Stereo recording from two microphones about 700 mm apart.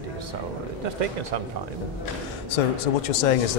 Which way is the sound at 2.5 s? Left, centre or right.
Left.